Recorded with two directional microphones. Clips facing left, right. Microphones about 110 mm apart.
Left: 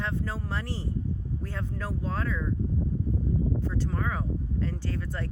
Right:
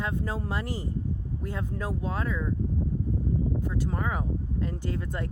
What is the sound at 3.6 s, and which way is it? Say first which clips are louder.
Speech: right 1 dB; 15° right (ahead or behind).